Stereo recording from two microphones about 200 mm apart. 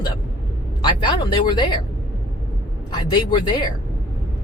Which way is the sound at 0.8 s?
25° left (ahead or behind).